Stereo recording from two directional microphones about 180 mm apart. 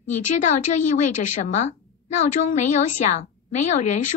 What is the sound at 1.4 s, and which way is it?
A woman's voice, 40° left (ahead or behind).